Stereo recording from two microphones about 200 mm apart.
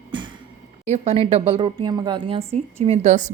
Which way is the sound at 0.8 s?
35° right (ahead or behind).